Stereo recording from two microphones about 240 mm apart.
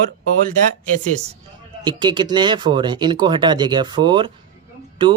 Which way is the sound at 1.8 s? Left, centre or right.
Centre.